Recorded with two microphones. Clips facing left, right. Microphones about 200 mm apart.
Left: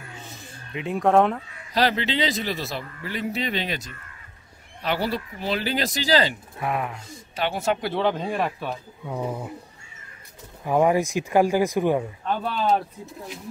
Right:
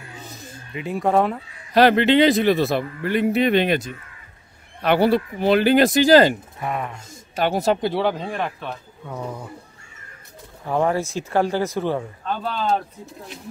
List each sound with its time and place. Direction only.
0.2 s a sound: 40° right (ahead or behind)
0.7 s speech: centre (ahead or behind)
1.7 s speech: 60° right (ahead or behind)
6.6 s speech: centre (ahead or behind)
7.1 s speech: 45° right (ahead or behind)
7.8 s speech: 10° right (ahead or behind)
8.2 s speech: centre (ahead or behind)
10.6 s speech: 10° left (ahead or behind)